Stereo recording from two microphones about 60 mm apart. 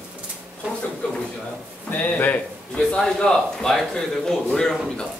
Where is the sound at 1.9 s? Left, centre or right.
Left.